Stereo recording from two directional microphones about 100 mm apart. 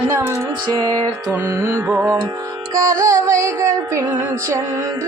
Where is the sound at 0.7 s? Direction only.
45° right (ahead or behind).